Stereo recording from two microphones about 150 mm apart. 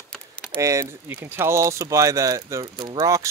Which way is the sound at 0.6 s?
20° right (ahead or behind).